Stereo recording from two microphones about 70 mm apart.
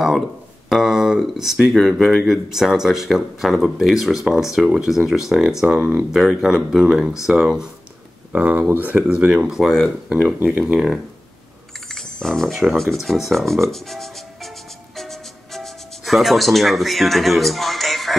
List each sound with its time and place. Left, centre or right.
0.7 s speech: centre
8.3 s speech: right
9.5 s speech: centre
11.9 s a sound: centre
12.7 s speech: centre
13.7 s music: centre